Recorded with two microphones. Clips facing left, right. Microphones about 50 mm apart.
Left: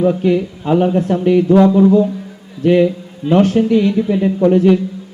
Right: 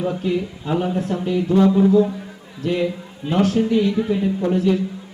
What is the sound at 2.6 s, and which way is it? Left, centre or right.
A man's voice, left.